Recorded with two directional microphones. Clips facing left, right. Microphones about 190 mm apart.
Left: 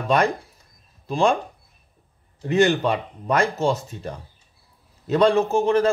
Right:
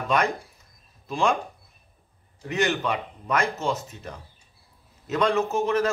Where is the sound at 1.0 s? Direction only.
35° left (ahead or behind).